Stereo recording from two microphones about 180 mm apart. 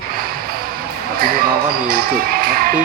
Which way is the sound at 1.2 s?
55° right (ahead or behind).